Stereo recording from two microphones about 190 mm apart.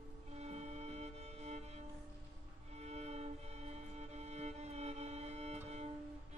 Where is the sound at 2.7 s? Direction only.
35° right (ahead or behind).